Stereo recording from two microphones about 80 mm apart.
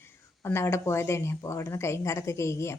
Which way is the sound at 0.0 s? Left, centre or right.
Left.